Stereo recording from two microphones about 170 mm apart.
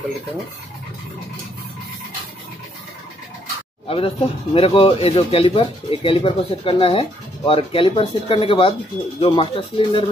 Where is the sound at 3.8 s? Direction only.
35° left (ahead or behind).